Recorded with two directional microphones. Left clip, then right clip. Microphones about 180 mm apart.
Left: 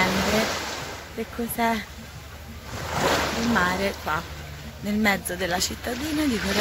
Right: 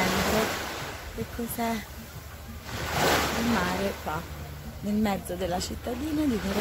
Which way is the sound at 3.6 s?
10° left (ahead or behind).